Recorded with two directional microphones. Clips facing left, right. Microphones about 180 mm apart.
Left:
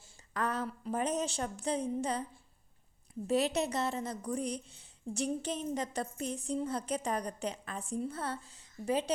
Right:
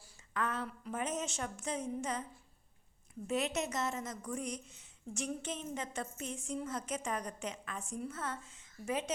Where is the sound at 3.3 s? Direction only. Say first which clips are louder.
Left 5 dB; 35° left (ahead or behind).